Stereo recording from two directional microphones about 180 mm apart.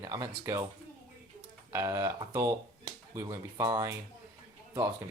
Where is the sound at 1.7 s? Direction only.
20° right (ahead or behind).